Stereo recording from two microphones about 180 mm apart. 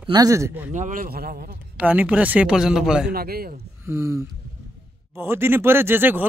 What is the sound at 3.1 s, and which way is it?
Speech, 60° right (ahead or behind).